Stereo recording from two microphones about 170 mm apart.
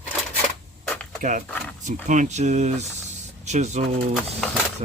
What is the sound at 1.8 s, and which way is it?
Speech, 45° right (ahead or behind).